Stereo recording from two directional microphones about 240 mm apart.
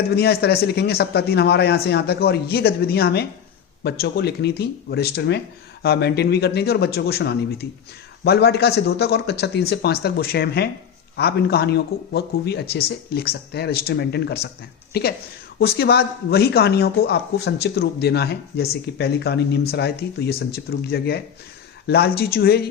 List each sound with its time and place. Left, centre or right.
0.2 s speech: left